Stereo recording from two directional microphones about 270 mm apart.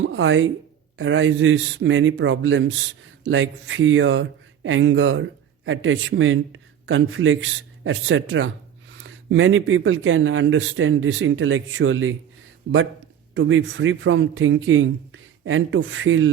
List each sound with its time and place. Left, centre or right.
0.1 s speech: right